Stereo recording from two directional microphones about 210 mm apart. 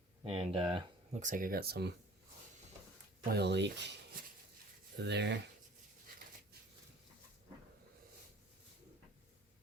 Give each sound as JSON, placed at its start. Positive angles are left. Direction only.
{"t": 0.3, "sound": "speech", "side_deg": -25}
{"t": 1.2, "sound": "speech", "side_deg": -40}
{"t": 3.3, "sound": "speech", "side_deg": -55}
{"t": 5.0, "sound": "speech", "side_deg": -55}